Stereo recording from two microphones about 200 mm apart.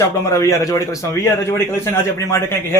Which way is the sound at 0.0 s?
15° left (ahead or behind).